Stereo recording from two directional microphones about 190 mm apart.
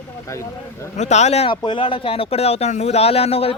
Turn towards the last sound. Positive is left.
turn(degrees=30)  # may be behind; listen again after turning